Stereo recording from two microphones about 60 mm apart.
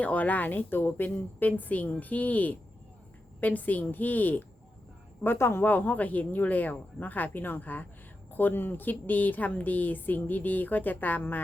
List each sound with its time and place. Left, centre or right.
0.0 s a woman's voice: left
5.2 s speech: left
5.6 s a woman's voice: left